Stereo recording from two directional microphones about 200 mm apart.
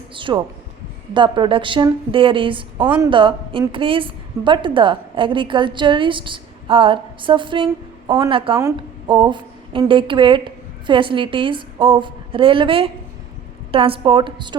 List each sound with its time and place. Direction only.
0.1 s a woman's voice: 25° right (ahead or behind)